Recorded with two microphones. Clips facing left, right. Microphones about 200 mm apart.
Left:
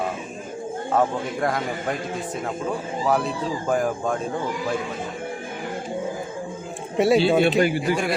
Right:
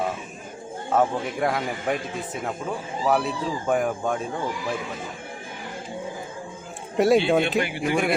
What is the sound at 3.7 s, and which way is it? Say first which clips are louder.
Speech: even; centre (ahead or behind).